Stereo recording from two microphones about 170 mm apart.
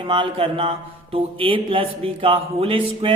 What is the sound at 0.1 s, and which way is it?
Speech, 30° right (ahead or behind).